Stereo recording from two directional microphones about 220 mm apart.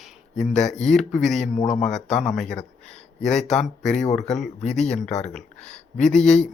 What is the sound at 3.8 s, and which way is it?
Speech, 35° left (ahead or behind).